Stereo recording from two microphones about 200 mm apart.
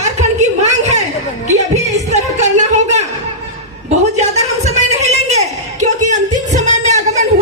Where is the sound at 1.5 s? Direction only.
35° right (ahead or behind).